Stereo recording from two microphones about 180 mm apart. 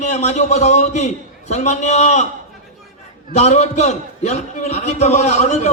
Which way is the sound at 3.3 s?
40° left (ahead or behind).